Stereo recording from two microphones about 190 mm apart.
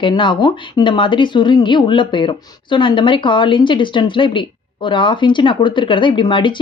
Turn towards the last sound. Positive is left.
turn(degrees=25)  # may be behind; listen again after turning